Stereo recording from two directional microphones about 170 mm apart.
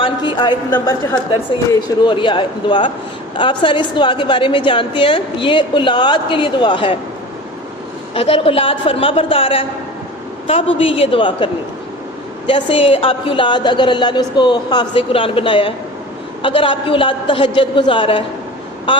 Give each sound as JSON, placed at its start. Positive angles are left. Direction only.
{"t": 0.0, "sound": "a woman's voice", "side_deg": 30}
{"t": 8.1, "sound": "a woman's voice", "side_deg": 35}
{"t": 12.5, "sound": "a woman's voice", "side_deg": 30}